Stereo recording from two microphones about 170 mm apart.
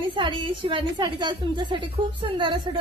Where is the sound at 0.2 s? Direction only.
30° right (ahead or behind).